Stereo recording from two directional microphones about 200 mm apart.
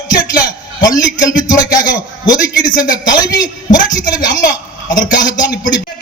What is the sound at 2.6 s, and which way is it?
A man's voice, 40° left (ahead or behind).